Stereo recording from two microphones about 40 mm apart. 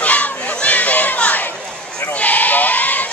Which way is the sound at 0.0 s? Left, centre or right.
Left.